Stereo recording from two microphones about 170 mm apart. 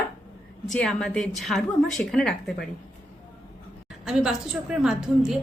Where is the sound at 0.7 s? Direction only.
5° left (ahead or behind).